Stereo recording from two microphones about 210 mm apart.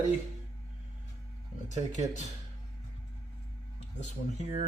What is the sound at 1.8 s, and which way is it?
Speech, 35° right (ahead or behind).